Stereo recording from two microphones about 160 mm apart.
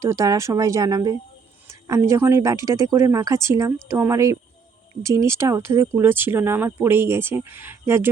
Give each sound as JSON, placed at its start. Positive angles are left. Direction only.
{"t": 0.0, "sound": "speech", "side_deg": -20}